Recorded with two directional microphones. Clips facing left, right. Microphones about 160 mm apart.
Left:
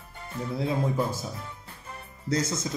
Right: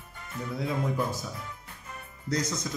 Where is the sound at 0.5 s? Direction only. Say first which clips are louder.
Left 3 dB; 30° left (ahead or behind).